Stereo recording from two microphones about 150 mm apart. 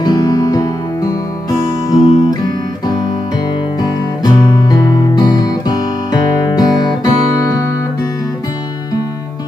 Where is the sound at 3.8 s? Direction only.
25° left (ahead or behind).